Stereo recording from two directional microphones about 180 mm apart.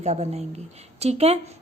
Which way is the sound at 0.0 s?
35° right (ahead or behind).